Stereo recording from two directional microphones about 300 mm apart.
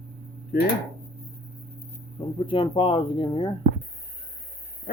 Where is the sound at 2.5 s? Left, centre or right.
Centre.